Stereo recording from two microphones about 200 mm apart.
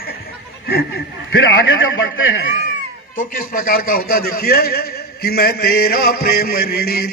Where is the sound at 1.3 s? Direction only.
70° left (ahead or behind).